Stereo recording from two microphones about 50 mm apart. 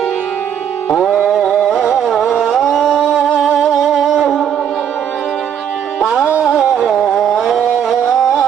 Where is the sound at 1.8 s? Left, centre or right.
Centre.